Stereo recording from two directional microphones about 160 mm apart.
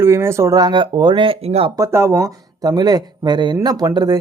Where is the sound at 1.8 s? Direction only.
15° right (ahead or behind).